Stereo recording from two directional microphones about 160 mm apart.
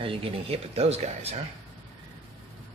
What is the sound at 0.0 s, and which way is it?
Speech, 35° right (ahead or behind).